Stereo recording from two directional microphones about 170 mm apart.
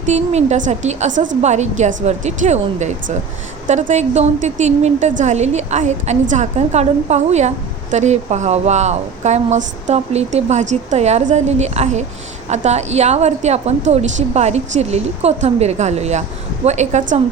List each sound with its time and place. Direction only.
0.0 s a woman's voice: 40° right (ahead or behind)